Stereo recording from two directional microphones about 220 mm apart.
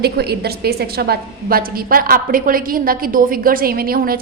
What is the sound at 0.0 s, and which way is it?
A woman's voice, 45° right (ahead or behind).